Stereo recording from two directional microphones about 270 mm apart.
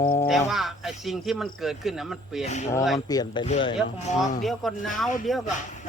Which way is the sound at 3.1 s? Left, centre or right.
Centre.